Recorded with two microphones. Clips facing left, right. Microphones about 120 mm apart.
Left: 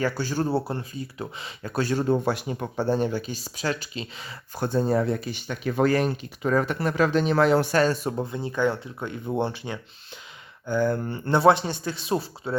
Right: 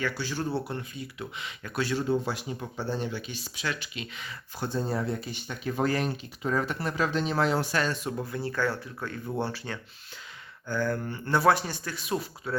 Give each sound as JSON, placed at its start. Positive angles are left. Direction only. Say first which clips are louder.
{"t": 0.0, "sound": "speech", "louder": "left 5 dB", "side_deg": 45}
{"t": 4.5, "sound": "speech", "louder": "left 7 dB", "side_deg": 55}
{"t": 7.8, "sound": "speech", "louder": "left 7 dB", "side_deg": 40}
{"t": 8.2, "sound": "speech", "louder": "left 4 dB", "side_deg": 20}